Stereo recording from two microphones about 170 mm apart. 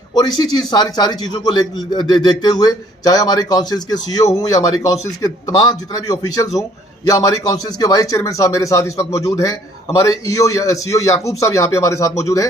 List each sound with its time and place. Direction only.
0.1 s a man's voice: 25° left (ahead or behind)